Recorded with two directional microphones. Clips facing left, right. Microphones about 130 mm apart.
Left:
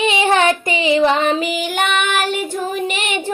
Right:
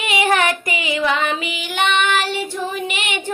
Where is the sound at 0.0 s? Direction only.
25° left (ahead or behind).